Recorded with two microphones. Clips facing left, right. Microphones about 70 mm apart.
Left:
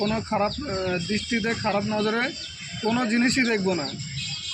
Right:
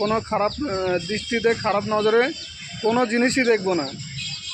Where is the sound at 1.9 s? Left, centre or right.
Right.